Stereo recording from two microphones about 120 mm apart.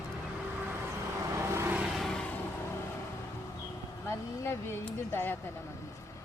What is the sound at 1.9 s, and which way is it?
Vehicle, 5° left (ahead or behind).